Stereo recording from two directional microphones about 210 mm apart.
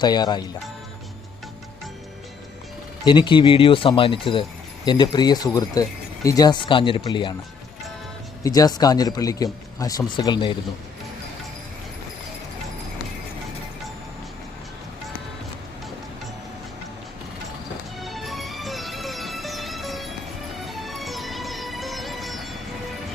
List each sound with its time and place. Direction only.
0.0 s speech: 20° left (ahead or behind)
3.0 s speech: 20° left (ahead or behind)
8.4 s speech: 15° left (ahead or behind)
18.0 s music: centre (ahead or behind)